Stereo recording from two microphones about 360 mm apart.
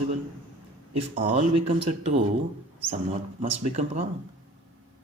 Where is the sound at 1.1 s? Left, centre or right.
Centre.